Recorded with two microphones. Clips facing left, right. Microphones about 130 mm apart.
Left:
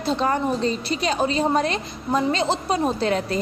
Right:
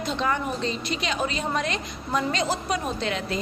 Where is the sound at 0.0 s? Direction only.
35° left (ahead or behind).